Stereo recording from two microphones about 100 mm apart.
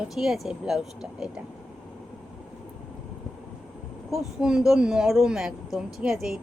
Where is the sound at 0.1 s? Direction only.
5° right (ahead or behind).